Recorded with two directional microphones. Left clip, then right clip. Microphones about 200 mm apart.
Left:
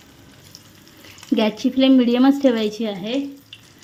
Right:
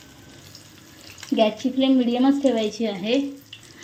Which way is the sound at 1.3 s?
25° left (ahead or behind).